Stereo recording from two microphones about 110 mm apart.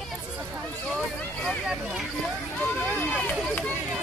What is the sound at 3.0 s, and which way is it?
Run, 10° left (ahead or behind).